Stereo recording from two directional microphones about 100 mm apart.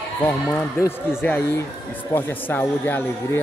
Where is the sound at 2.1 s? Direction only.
20° left (ahead or behind).